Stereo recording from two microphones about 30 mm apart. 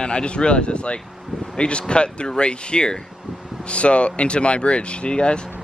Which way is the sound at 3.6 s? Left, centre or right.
Left.